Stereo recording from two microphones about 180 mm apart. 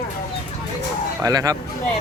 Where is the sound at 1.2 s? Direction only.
20° right (ahead or behind).